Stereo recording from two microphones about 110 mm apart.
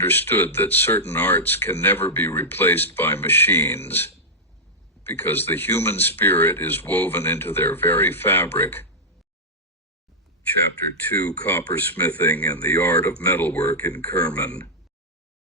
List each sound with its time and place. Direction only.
0.0 s speech: 20° left (ahead or behind)
11.2 s speech: 15° left (ahead or behind)